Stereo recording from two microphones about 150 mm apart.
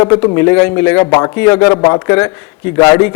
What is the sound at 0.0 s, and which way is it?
A man's voice, 15° left (ahead or behind).